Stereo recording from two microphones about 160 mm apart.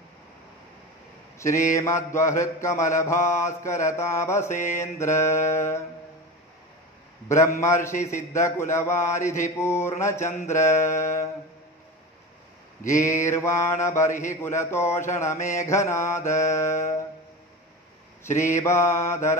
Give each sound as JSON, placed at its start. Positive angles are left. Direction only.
{"t": 1.8, "sound": "mantra", "side_deg": 20}
{"t": 7.2, "sound": "mantra", "side_deg": 15}
{"t": 12.8, "sound": "mantra", "side_deg": 20}
{"t": 18.2, "sound": "mantra", "side_deg": 15}